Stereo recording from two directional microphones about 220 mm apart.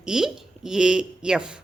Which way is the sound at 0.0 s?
Centre (ahead or behind).